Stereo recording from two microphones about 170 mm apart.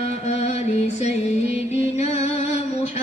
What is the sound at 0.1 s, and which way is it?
Music, 40° left (ahead or behind).